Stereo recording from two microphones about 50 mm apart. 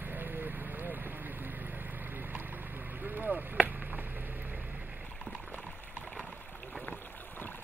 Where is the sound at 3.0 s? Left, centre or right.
Right.